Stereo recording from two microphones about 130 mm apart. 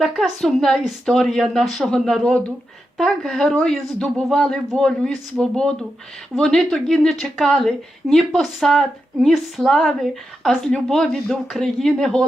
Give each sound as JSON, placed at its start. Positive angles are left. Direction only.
{"t": 0.0, "sound": "a woman's voice", "side_deg": 0}